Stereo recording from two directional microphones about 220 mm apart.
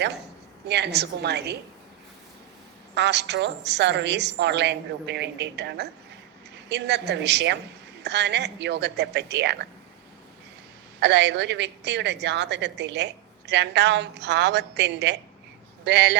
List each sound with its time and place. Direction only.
0.7 s a woman's voice: 50° right (ahead or behind)
2.9 s a woman's voice: 50° right (ahead or behind)
11.0 s a woman's voice: 50° right (ahead or behind)